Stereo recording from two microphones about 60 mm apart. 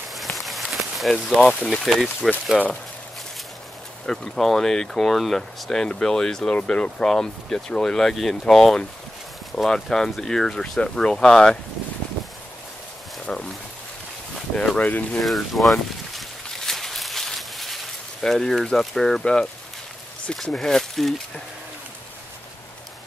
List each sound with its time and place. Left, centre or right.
0.1 s a sound: centre
1.6 s speech: centre
2.5 s speech: centre
4.0 s speech: centre
13.2 s speech: centre
14.8 s speech: left
15.2 s speech: centre
16.2 s a sound: centre
20.5 s speech: centre